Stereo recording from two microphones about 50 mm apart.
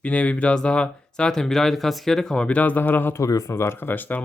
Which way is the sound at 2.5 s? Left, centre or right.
Left.